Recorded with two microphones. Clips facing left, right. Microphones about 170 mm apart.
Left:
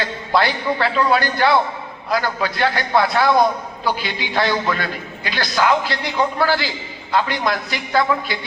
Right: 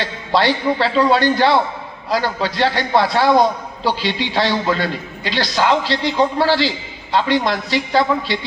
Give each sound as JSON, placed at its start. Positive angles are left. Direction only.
{"t": 0.3, "sound": "a man's voice", "side_deg": -25}